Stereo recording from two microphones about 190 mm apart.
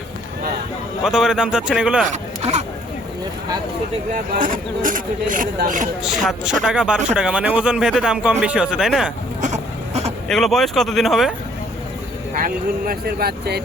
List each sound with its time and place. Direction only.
1.0 s speech: centre (ahead or behind)
2.0 s a sound: 35° right (ahead or behind)
4.1 s speech: 45° right (ahead or behind)
6.0 s speech: centre (ahead or behind)
9.4 s a sound: 35° right (ahead or behind)
10.2 s speech: centre (ahead or behind)
12.3 s speech: 45° right (ahead or behind)